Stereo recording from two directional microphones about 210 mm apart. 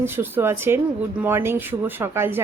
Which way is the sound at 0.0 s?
10° right (ahead or behind).